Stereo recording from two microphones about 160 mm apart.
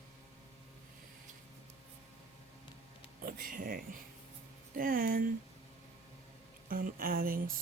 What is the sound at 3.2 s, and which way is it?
Speech, 60° right (ahead or behind).